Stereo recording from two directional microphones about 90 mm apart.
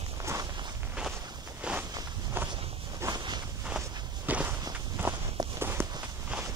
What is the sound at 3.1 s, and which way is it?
Walk, 55° right (ahead or behind).